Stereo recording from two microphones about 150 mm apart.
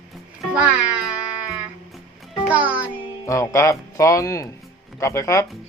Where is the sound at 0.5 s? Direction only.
10° right (ahead or behind).